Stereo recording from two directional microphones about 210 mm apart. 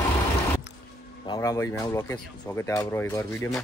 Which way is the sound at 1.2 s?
20° left (ahead or behind).